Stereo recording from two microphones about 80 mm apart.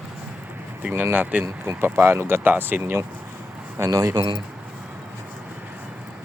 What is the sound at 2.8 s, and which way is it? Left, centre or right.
Speech, right.